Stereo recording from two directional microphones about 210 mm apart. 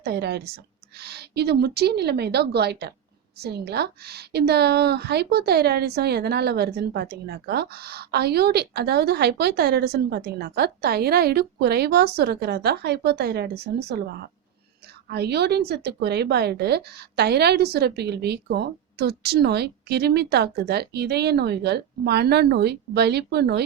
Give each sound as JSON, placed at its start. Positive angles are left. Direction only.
{"t": 0.0, "sound": "a woman's voice", "side_deg": -50}